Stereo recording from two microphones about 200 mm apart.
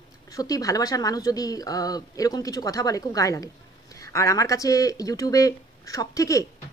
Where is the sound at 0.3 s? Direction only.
20° left (ahead or behind).